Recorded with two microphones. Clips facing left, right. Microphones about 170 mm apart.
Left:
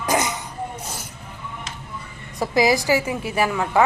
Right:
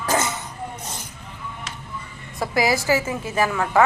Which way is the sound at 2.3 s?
15° left (ahead or behind).